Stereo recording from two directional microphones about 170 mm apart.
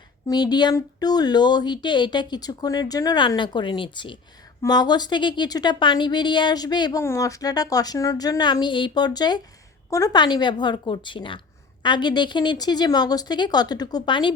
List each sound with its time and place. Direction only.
0.3 s speech: 25° left (ahead or behind)